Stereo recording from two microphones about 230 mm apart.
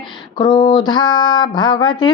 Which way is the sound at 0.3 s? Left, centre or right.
Centre.